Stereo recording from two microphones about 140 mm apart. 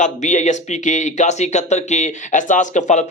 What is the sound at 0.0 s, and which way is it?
Speech, 60° left (ahead or behind).